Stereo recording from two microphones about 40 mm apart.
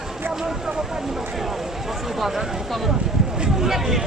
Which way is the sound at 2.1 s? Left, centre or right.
Centre.